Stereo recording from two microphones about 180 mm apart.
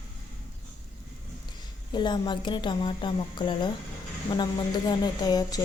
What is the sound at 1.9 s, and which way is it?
Speech, 25° left (ahead or behind).